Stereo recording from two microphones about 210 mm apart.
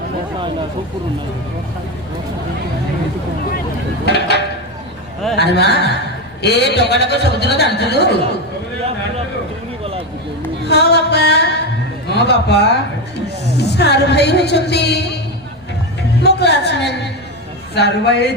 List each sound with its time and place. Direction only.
4.0 s a man's voice: 55° left (ahead or behind)
10.7 s a man's voice: 50° left (ahead or behind)
16.2 s a sound: 55° left (ahead or behind)
17.7 s a man's voice: 55° left (ahead or behind)